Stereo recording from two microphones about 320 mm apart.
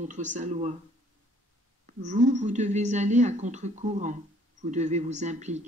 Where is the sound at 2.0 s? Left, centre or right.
Right.